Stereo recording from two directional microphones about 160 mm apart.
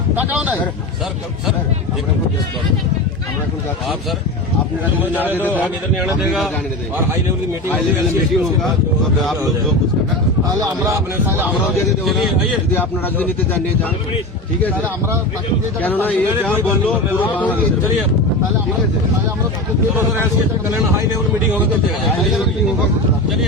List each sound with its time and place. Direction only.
0.2 s speech: 10° right (ahead or behind)
5.1 s speech: 10° right (ahead or behind)
5.4 s speech: 10° left (ahead or behind)
6.1 s a man's voice: centre (ahead or behind)
10.6 s speech: 20° right (ahead or behind)
12.0 s a man's voice: centre (ahead or behind)
12.7 s speech: 10° left (ahead or behind)
15.8 s speech: 10° left (ahead or behind)
16.3 s speech: 15° right (ahead or behind)
17.2 s speech: 10° left (ahead or behind)